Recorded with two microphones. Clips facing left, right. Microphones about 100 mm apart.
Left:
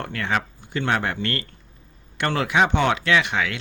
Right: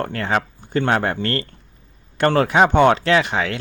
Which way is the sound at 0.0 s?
40° right (ahead or behind).